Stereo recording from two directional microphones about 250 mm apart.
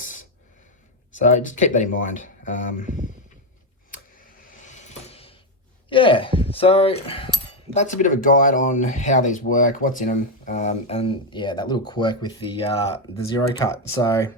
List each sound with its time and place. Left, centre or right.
0.0 s a sound: left
1.1 s speech: left
4.5 s coin: left
5.9 s speech: centre